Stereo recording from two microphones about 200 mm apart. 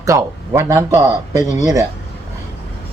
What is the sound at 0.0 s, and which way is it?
Speech, 15° right (ahead or behind).